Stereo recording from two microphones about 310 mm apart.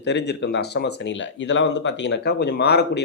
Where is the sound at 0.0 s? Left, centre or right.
Left.